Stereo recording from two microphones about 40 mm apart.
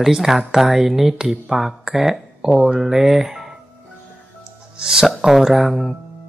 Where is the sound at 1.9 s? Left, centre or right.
Centre.